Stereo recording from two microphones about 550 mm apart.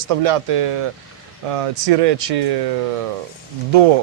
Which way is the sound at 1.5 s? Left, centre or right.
Right.